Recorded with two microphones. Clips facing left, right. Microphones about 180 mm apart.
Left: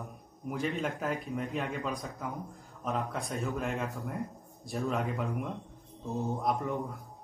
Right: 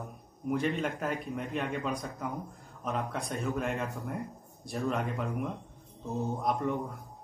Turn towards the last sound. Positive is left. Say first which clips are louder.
# right 1 dB
turn(degrees=0)  # may be behind; listen again after turning